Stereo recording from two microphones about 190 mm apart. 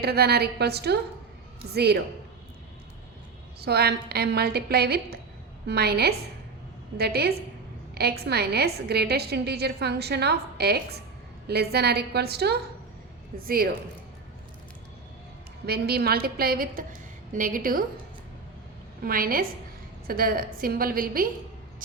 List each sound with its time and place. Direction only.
0.0 s a woman's voice: 55° right (ahead or behind)
3.6 s a woman's voice: 55° right (ahead or behind)
15.6 s a woman's voice: 55° right (ahead or behind)
19.0 s a woman's voice: 50° right (ahead or behind)